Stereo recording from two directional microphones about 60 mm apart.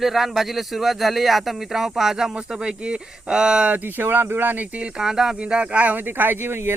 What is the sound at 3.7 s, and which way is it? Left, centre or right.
Speech, right.